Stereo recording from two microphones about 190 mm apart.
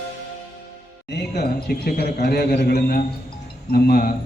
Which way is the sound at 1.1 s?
60° left (ahead or behind).